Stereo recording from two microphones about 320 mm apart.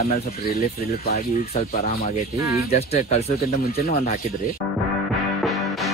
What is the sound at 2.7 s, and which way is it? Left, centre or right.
Speech, centre.